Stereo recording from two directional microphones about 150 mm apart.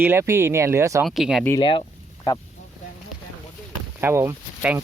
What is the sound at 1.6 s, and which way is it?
Speech, 35° left (ahead or behind).